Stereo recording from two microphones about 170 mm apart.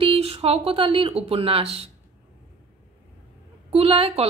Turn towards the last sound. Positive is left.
turn(degrees=-35)  # may be behind; listen again after turning